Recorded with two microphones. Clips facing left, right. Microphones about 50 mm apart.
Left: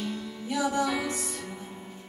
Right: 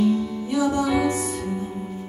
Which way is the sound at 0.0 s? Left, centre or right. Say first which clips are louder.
Right 13 dB; centre.